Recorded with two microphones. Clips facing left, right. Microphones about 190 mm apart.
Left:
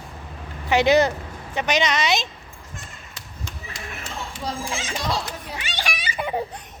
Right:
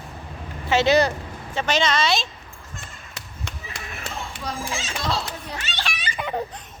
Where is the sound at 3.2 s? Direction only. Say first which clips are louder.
Right 1 dB; 65° right (ahead or behind).